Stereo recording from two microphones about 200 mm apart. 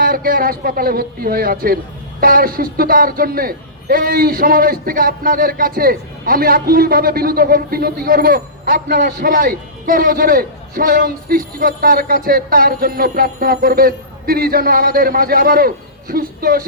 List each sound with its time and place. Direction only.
0.0 s a man's voice: 45° right (ahead or behind)